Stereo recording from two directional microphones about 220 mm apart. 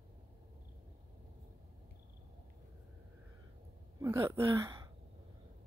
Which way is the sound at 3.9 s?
15° right (ahead or behind).